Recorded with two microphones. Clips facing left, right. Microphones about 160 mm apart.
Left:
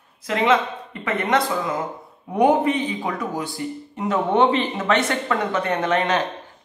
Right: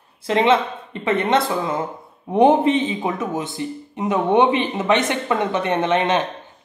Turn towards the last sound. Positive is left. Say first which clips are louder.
# right 2 dB
turn(degrees=-20)  # may be behind; listen again after turning